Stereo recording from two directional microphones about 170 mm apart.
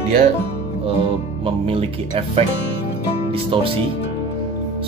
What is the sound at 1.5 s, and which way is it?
Speech, 30° right (ahead or behind).